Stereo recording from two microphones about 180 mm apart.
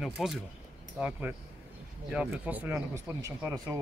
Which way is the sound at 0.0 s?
Centre (ahead or behind).